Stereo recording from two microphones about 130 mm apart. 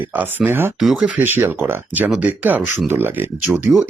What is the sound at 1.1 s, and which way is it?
Speech, 15° right (ahead or behind).